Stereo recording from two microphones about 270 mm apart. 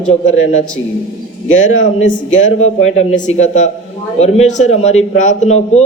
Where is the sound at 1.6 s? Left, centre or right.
Left.